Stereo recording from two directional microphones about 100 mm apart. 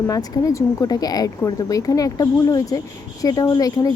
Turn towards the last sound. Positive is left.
turn(degrees=35)  # may be behind; listen again after turning